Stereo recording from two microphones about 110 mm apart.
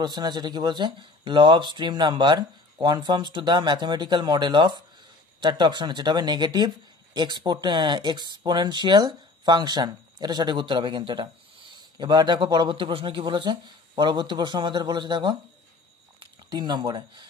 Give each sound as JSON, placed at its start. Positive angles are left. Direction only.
{"t": 0.0, "sound": "speech", "side_deg": -40}